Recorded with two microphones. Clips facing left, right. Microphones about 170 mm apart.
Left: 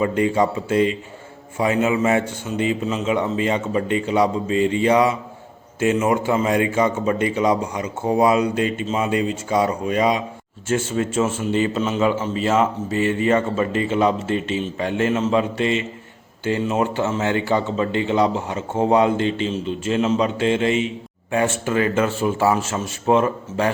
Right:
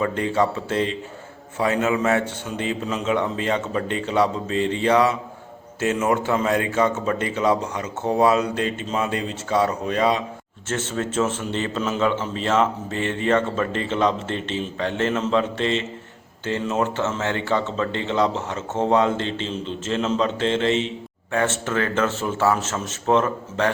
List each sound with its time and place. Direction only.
0.0 s a man's voice: 10° left (ahead or behind)